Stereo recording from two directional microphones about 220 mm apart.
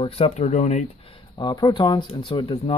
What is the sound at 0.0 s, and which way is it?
Speech, 25° left (ahead or behind).